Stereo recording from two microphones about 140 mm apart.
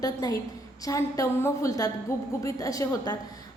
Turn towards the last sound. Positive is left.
turn(degrees=25)  # may be behind; listen again after turning